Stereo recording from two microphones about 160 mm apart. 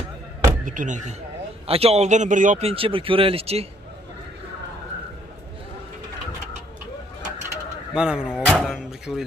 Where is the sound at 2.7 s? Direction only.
35° right (ahead or behind).